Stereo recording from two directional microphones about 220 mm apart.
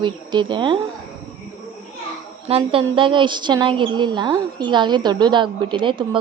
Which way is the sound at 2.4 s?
25° right (ahead or behind).